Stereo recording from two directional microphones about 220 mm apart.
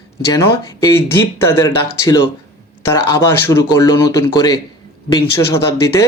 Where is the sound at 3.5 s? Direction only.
15° left (ahead or behind).